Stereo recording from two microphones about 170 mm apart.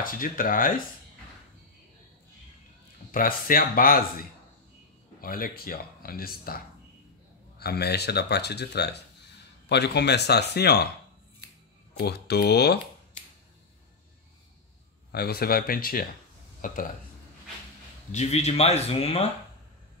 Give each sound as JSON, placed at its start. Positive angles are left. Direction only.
{"t": 0.0, "sound": "speech", "side_deg": 55}
{"t": 3.1, "sound": "speech", "side_deg": 55}
{"t": 7.5, "sound": "speech", "side_deg": 70}
{"t": 12.0, "sound": "speech", "side_deg": 70}
{"t": 15.0, "sound": "speech", "side_deg": 70}
{"t": 18.1, "sound": "speech", "side_deg": 40}